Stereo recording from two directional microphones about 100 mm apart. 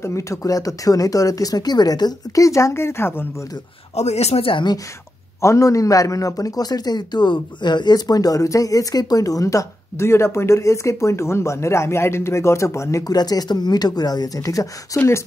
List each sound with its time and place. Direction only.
0.0 s a man's voice: 30° left (ahead or behind)
3.9 s speech: 90° left; by 4.6 s 65° left (ahead or behind)
5.4 s a man's voice: 30° left (ahead or behind)